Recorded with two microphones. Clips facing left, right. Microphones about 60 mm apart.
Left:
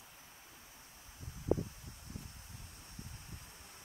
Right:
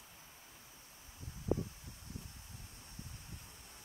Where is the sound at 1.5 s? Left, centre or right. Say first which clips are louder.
Left 2 dB; left.